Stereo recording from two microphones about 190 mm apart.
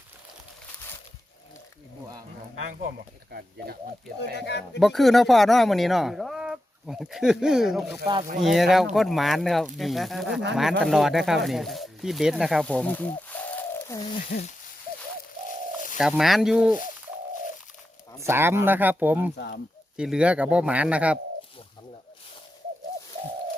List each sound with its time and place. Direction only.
4.4 s speech: 65° left (ahead or behind)
4.8 s speech: centre (ahead or behind)
14.3 s speech: 60° left (ahead or behind)
15.4 s bird: 45° left (ahead or behind)
16.0 s speech: centre (ahead or behind)
18.2 s a man's voice: 10° right (ahead or behind)